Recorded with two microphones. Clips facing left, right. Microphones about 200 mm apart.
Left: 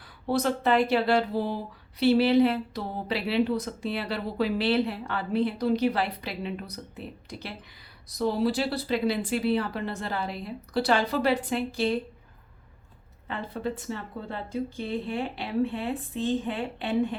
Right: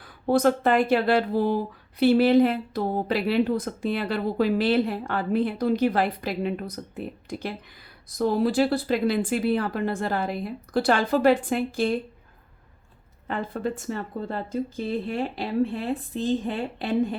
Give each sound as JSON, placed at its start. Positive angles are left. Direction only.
{"t": 0.3, "sound": "speech", "side_deg": -50}
{"t": 13.2, "sound": "speech", "side_deg": -45}